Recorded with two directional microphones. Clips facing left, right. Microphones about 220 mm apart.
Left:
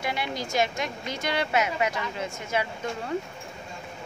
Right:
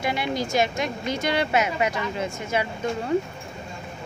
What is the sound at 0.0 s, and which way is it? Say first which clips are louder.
Speech: right 5 dB; 20° right (ahead or behind).